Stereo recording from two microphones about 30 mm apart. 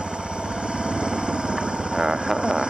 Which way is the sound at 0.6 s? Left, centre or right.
Right.